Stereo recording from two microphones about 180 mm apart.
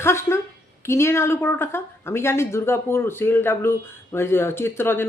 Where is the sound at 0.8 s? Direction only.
15° left (ahead or behind).